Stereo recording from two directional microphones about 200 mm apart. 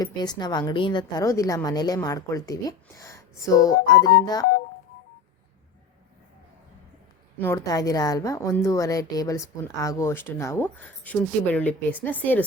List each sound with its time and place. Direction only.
0.0 s a woman's voice: 20° left (ahead or behind)
7.3 s a woman's voice: 15° left (ahead or behind)